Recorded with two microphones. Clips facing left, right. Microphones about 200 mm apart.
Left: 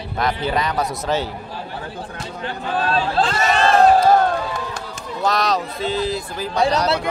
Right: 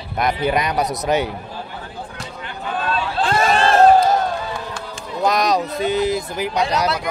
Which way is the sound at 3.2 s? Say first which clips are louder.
Right 2 dB; 50° right (ahead or behind).